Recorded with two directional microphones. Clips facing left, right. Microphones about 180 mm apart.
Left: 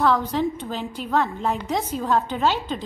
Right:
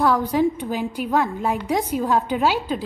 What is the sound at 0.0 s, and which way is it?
A woman's voice, 10° right (ahead or behind).